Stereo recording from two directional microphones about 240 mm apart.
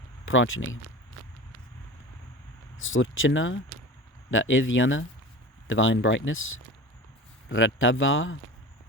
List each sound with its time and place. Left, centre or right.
0.3 s speech: left
2.7 s speech: left